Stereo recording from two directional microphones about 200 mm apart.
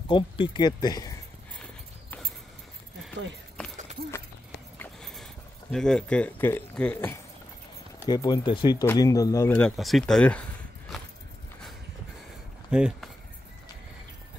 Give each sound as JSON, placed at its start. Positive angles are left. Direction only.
{"t": 0.1, "sound": "speech", "side_deg": 25}
{"t": 1.6, "sound": "clip-clop", "side_deg": 5}
{"t": 3.6, "sound": "keys jangling", "side_deg": 5}
{"t": 4.7, "sound": "a sound", "side_deg": 0}
{"t": 8.1, "sound": "speech", "side_deg": 20}
{"t": 9.7, "sound": "speech", "side_deg": 0}
{"t": 12.7, "sound": "speech", "side_deg": -5}